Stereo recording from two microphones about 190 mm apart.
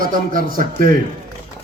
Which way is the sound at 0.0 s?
45° right (ahead or behind).